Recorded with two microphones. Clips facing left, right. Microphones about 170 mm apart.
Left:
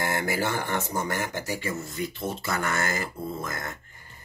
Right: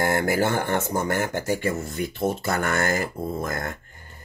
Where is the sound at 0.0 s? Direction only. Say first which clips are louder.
Right 5 dB; 50° right (ahead or behind).